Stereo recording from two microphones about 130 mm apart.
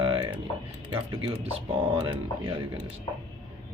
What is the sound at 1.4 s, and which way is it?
Speech, 50° right (ahead or behind).